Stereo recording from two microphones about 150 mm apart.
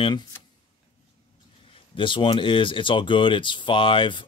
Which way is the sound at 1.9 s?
35° left (ahead or behind).